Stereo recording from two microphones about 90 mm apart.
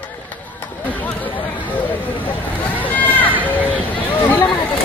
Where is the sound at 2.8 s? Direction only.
20° left (ahead or behind).